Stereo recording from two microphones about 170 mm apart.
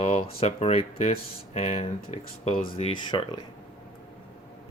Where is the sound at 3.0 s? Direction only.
25° left (ahead or behind).